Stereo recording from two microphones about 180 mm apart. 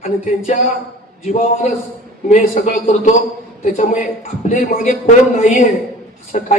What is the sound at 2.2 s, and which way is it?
A man's voice, 40° left (ahead or behind).